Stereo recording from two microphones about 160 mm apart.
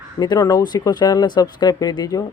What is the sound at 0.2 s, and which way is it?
Speech, 25° left (ahead or behind).